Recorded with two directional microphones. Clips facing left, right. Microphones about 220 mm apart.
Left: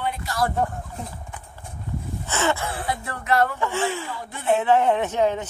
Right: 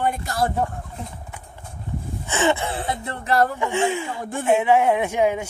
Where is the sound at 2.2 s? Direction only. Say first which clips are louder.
Right 3 dB; 15° right (ahead or behind).